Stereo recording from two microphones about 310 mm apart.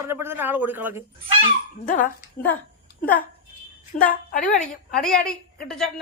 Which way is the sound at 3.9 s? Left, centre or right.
Left.